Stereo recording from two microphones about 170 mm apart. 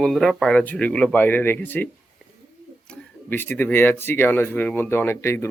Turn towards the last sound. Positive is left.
turn(degrees=15)  # may be behind; listen again after turning